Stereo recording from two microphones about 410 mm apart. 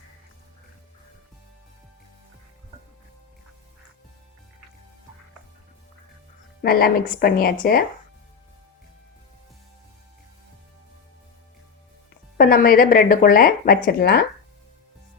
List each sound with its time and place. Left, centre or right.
6.6 s speech: left
12.4 s speech: left